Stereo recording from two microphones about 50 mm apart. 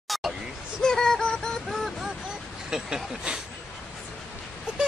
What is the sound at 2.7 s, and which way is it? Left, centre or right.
Speech, centre.